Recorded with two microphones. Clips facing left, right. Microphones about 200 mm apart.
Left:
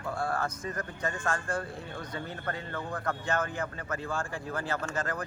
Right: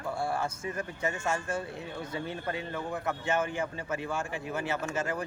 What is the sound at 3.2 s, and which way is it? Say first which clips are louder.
Speech: right 3 dB; 25° right (ahead or behind).